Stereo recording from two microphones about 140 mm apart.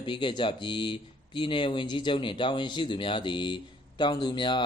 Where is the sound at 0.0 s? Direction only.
35° left (ahead or behind).